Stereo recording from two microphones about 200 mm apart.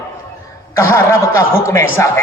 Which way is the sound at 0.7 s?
15° left (ahead or behind).